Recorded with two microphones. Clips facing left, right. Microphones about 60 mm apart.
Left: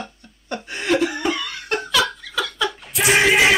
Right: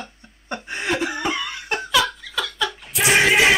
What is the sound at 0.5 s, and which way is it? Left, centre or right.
Chuckle, right.